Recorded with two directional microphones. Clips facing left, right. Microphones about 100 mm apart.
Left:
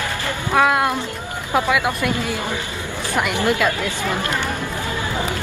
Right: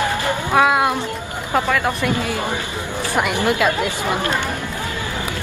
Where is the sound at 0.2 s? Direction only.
15° right (ahead or behind).